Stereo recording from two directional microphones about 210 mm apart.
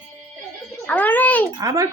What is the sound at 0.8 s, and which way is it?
Speech, 10° left (ahead or behind).